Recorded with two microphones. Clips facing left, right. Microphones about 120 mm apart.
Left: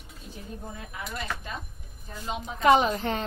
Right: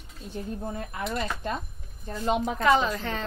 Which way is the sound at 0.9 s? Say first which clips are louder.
Right 3 dB; 50° right (ahead or behind).